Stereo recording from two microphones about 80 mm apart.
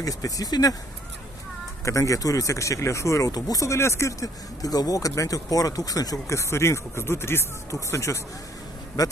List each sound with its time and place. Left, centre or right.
0.0 s speech: left
1.9 s speech: left
9.0 s speech: left